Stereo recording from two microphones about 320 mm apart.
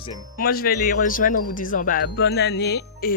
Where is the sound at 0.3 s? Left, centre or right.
Left.